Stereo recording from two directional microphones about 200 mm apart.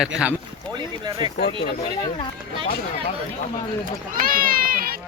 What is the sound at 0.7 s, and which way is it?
Speech, 20° right (ahead or behind).